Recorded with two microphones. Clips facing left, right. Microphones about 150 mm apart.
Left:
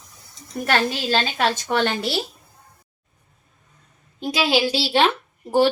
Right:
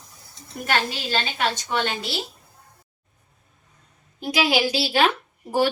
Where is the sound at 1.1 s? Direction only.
50° left (ahead or behind).